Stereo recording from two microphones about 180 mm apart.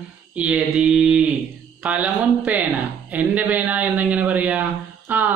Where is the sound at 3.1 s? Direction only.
10° right (ahead or behind).